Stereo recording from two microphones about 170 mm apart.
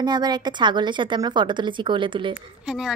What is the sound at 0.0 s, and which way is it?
A woman's voice, 25° right (ahead or behind).